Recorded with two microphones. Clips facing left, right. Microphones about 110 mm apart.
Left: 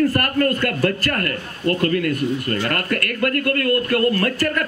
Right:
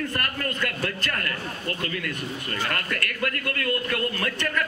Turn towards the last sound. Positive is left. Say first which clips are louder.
# left 8 dB
turn(degrees=45)  # may be behind; listen again after turning